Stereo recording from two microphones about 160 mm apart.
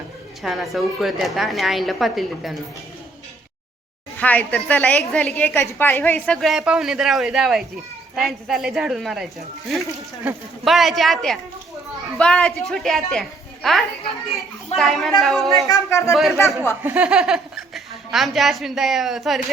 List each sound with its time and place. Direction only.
0.4 s a woman's voice: centre (ahead or behind)
4.2 s a woman's voice: 10° left (ahead or behind)
15.6 s speech: 20° left (ahead or behind)
16.8 s a woman's voice: 10° right (ahead or behind)